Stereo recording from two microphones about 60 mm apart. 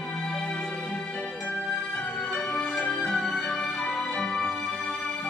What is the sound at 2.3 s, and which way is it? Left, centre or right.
Music, centre.